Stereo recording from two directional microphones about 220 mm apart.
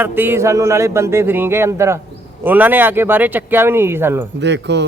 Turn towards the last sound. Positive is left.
turn(degrees=-50)  # may be behind; listen again after turning